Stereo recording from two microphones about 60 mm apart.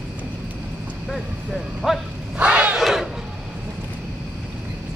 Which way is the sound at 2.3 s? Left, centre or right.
Centre.